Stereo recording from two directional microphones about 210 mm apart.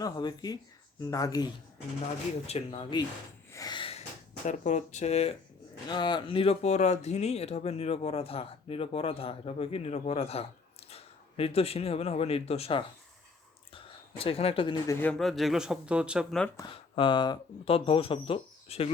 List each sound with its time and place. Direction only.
0.0 s speech: 20° left (ahead or behind)
2.5 s speech: 25° left (ahead or behind)
3.5 s snort: 20° left (ahead or behind)
4.4 s speech: 35° left (ahead or behind)
5.9 s speech: 20° left (ahead or behind)
14.8 s speech: 5° left (ahead or behind)
16.6 s speech: 25° left (ahead or behind)